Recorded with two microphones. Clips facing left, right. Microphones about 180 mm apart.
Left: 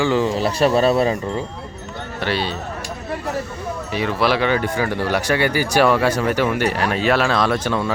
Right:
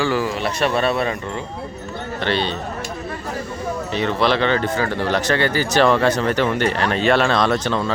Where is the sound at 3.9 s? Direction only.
5° left (ahead or behind).